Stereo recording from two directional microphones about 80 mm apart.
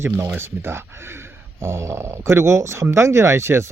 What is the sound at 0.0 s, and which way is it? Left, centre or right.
Speech, right.